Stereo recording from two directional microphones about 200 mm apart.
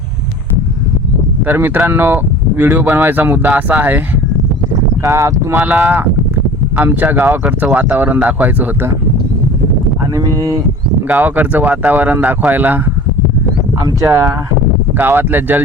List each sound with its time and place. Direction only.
1.5 s speech: 10° right (ahead or behind)
5.0 s speech: 15° right (ahead or behind)
10.2 s speech: 15° right (ahead or behind)
13.8 s speech: 15° right (ahead or behind)